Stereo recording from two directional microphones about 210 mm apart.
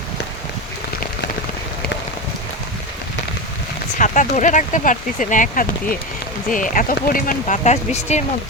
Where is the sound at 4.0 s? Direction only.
35° left (ahead or behind).